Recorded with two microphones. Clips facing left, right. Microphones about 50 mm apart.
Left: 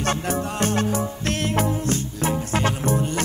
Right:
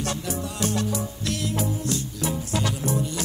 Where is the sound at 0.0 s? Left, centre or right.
Left.